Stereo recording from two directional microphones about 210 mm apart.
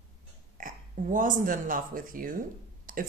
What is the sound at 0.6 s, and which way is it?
Speech, 40° right (ahead or behind).